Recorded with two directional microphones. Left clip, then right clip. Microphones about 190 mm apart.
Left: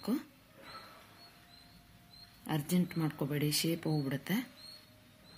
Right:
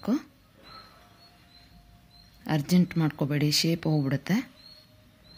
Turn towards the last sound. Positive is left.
turn(degrees=-40)  # may be behind; listen again after turning